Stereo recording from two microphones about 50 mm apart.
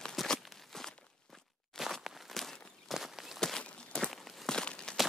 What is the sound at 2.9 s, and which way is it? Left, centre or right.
Walk, centre.